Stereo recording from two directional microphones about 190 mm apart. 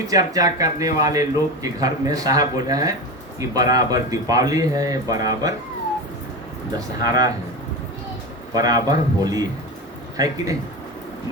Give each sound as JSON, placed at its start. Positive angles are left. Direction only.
{"t": 0.1, "sound": "speech", "side_deg": -20}
{"t": 6.7, "sound": "speech", "side_deg": -20}
{"t": 8.5, "sound": "speech", "side_deg": -20}